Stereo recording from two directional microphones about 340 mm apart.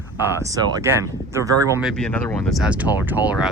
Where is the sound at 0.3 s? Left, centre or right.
Centre.